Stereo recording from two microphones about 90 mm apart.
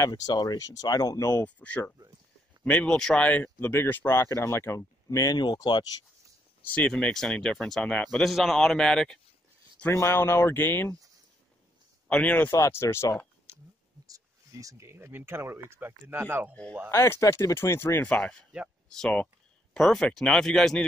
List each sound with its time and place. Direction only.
0.1 s speech: 50° left (ahead or behind)
1.4 s speech: 15° left (ahead or behind); by 5.9 s 50° left (ahead or behind)
6.9 s a man's voice: 5° left (ahead or behind)
9.9 s speech: 30° left (ahead or behind)
12.1 s speech: 15° left (ahead or behind)
12.4 s speech: 35° left (ahead or behind)
13.5 s a sound: 30° right (ahead or behind)
14.0 s speech: 40° right (ahead or behind); by 16.5 s 25° right (ahead or behind)
16.9 s speech: 35° left (ahead or behind)
18.9 s a man's voice: 10° left (ahead or behind)